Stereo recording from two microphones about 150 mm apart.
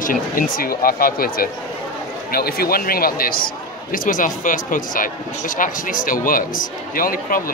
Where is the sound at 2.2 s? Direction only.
90° left.